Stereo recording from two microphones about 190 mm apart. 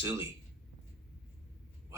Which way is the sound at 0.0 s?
15° right (ahead or behind).